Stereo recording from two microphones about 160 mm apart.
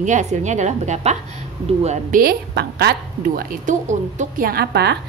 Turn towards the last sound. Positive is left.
turn(degrees=-80)